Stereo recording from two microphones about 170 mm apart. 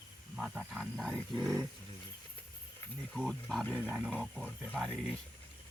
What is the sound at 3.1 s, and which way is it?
Speech, centre (ahead or behind).